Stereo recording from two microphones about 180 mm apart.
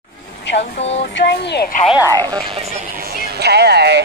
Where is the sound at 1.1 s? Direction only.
70° left (ahead or behind).